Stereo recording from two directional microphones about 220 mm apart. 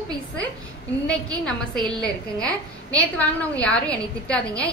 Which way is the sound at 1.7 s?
20° right (ahead or behind).